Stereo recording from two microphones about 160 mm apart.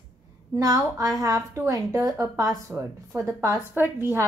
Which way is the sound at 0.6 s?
20° right (ahead or behind).